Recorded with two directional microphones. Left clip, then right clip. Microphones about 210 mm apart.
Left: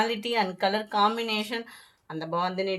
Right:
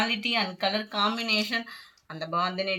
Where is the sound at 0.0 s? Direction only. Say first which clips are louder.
Left 1 dB; 60° left (ahead or behind).